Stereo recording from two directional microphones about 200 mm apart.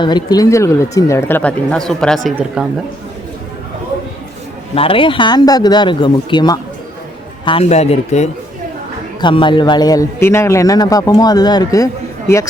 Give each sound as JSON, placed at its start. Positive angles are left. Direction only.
{"t": 0.0, "sound": "a man's voice", "side_deg": 20}
{"t": 4.7, "sound": "a man's voice", "side_deg": 25}
{"t": 9.2, "sound": "a man's voice", "side_deg": 25}